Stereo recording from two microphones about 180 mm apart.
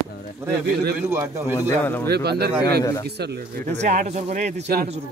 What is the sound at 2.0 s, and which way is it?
Speech, 65° right (ahead or behind).